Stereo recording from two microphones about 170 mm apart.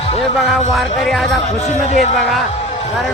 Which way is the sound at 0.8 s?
Centre (ahead or behind).